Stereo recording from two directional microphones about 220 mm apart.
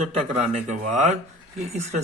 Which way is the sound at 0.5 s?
30° right (ahead or behind).